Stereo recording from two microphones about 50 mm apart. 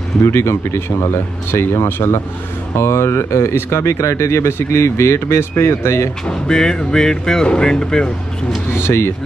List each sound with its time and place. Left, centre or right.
0.2 s speech: left
2.8 s speech: left
6.2 s speech: centre
8.8 s speech: left